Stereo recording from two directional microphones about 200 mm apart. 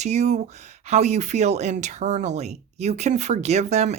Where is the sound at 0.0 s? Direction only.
35° right (ahead or behind).